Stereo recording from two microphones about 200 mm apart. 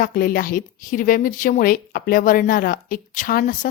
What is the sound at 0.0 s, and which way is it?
A woman's voice, 45° left (ahead or behind).